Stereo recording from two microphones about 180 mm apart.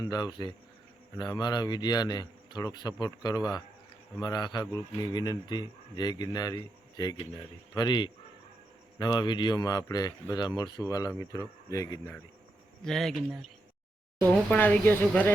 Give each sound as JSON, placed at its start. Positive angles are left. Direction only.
{"t": 0.0, "sound": "speech", "side_deg": 20}
{"t": 12.8, "sound": "speech", "side_deg": 0}